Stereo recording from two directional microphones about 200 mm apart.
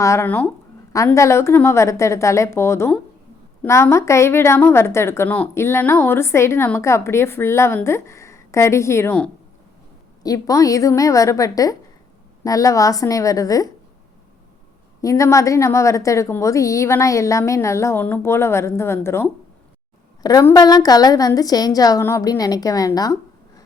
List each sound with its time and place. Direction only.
0.0 s a woman's voice: 15° left (ahead or behind)
15.0 s a woman's voice: 15° left (ahead or behind)